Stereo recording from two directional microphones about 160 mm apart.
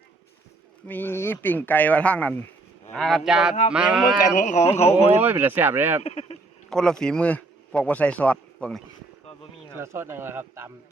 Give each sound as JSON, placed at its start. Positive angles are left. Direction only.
{"t": 0.9, "sound": "speech", "side_deg": 15}
{"t": 2.9, "sound": "a man's voice", "side_deg": 0}
{"t": 4.4, "sound": "speech", "side_deg": 50}
{"t": 5.2, "sound": "speech", "side_deg": -10}
{"t": 6.0, "sound": "speech", "side_deg": 40}
{"t": 6.7, "sound": "speech", "side_deg": 5}
{"t": 9.7, "sound": "speech", "side_deg": -15}